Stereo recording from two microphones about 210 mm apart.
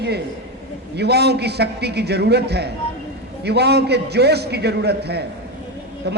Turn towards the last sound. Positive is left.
turn(degrees=-55)  # may be behind; listen again after turning